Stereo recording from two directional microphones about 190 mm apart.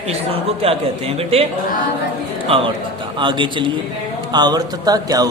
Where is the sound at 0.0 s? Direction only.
30° right (ahead or behind).